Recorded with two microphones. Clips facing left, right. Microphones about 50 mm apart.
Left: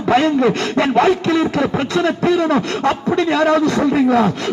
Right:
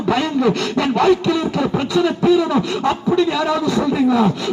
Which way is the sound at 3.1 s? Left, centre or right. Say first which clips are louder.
Left 3 dB; left.